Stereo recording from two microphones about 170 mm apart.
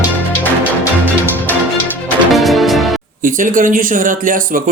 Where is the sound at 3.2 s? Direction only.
55° right (ahead or behind).